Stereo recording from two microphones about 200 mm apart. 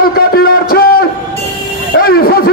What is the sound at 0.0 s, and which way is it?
Music, 50° left (ahead or behind).